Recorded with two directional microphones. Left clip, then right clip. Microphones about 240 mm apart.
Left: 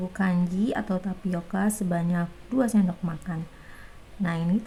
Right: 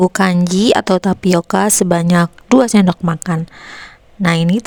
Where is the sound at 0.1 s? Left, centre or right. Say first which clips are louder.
Right 14 dB; right.